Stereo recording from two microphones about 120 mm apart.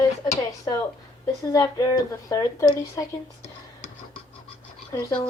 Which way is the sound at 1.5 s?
30° left (ahead or behind).